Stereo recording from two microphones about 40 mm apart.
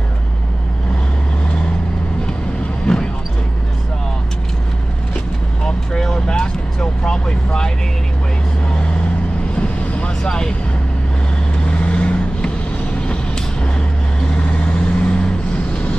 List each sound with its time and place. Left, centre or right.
2.9 s basketball bounce: centre
5.6 s vehicle: centre
9.6 s vehicle: left
11.6 s vehicle: left